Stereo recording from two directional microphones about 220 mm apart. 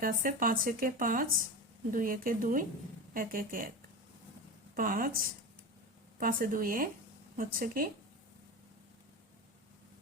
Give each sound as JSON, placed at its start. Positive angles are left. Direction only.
{"t": 0.0, "sound": "speech", "side_deg": -40}
{"t": 4.7, "sound": "speech", "side_deg": -40}